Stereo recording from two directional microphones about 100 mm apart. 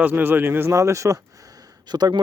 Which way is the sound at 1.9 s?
45° right (ahead or behind).